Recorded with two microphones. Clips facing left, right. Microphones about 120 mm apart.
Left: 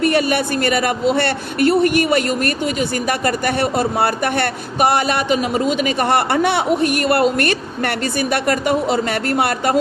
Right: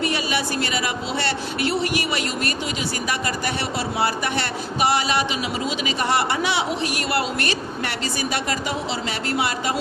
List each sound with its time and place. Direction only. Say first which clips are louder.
0.0 s speech: left 8 dB; 55° left (ahead or behind)